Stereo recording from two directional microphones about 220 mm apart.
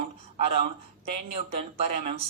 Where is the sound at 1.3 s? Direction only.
25° right (ahead or behind).